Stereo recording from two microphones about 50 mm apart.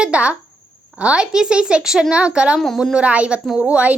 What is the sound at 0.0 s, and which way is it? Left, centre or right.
A woman's voice, right.